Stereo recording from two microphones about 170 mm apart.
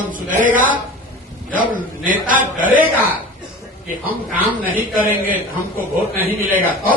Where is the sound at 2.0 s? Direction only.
50° right (ahead or behind).